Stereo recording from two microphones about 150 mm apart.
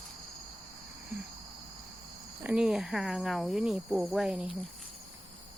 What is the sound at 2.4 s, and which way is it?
Speech, 5° right (ahead or behind).